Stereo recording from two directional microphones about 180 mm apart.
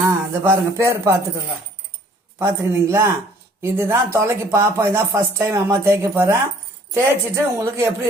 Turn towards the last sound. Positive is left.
turn(degrees=-15)  # may be behind; listen again after turning